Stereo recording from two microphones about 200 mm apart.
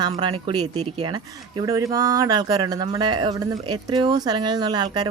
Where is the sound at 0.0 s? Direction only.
25° right (ahead or behind).